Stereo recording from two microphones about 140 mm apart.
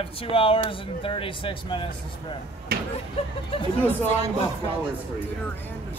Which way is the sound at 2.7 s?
90° right.